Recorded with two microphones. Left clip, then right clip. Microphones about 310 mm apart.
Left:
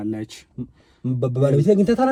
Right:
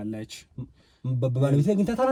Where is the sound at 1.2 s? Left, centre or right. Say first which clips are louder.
Left 6 dB; centre.